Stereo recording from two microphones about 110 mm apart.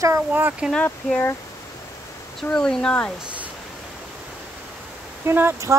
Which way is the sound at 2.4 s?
5° left (ahead or behind).